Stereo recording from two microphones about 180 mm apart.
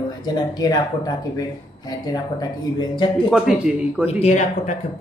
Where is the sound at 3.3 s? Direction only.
5° right (ahead or behind).